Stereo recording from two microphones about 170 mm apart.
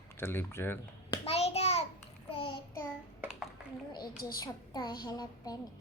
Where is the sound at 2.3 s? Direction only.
30° left (ahead or behind).